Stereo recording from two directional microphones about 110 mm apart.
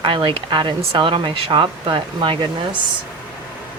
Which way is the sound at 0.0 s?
50° right (ahead or behind).